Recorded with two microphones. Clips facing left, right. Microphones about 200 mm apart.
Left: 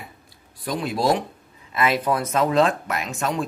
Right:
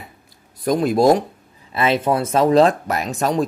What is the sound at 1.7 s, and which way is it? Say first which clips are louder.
Speech: right 3 dB; 30° right (ahead or behind).